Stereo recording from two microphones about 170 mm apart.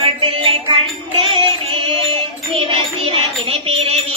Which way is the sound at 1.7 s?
30° right (ahead or behind).